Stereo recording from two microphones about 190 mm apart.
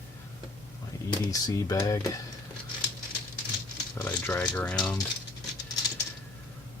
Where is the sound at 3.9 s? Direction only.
10° left (ahead or behind).